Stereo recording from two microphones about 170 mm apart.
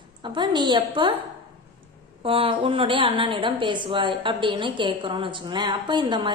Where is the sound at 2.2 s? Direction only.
30° right (ahead or behind).